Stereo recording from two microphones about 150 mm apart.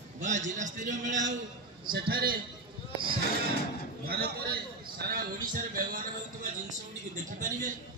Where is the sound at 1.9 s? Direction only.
90° right.